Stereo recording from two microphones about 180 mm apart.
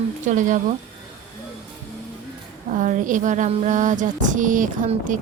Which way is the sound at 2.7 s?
45° right (ahead or behind).